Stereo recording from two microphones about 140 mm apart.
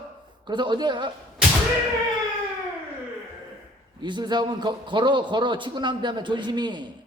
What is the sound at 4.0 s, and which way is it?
A man's voice, 30° right (ahead or behind).